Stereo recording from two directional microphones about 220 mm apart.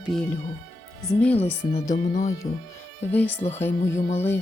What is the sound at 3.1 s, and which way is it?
Speech, 5° left (ahead or behind).